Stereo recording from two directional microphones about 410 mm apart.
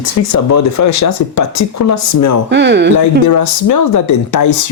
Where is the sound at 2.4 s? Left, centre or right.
Right.